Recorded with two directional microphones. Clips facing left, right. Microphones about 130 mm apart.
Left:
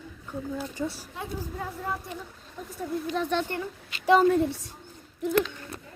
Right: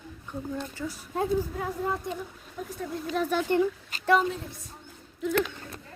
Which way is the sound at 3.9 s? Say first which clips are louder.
Even; 40° right (ahead or behind).